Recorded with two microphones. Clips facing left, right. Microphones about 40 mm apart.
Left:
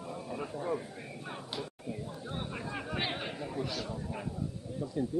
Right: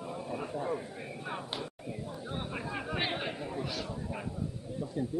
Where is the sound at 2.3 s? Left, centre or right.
Centre.